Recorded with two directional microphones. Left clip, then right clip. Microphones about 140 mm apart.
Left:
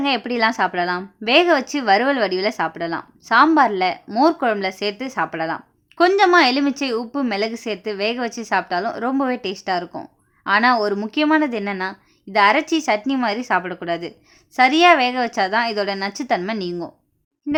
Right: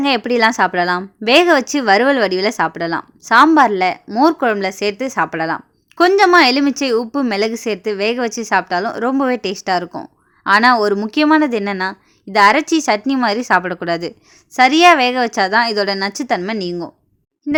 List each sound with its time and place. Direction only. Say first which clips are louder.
0.0 s speech: right 5 dB; 30° right (ahead or behind)